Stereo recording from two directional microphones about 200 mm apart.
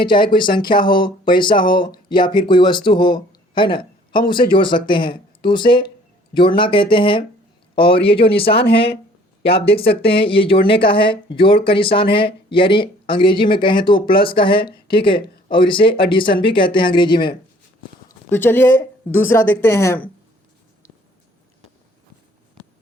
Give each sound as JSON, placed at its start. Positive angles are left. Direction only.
{"t": 0.1, "sound": "speech", "side_deg": 25}
{"t": 8.6, "sound": "speech", "side_deg": 60}
{"t": 9.7, "sound": "speech", "side_deg": 30}
{"t": 18.3, "sound": "a woman's voice", "side_deg": 10}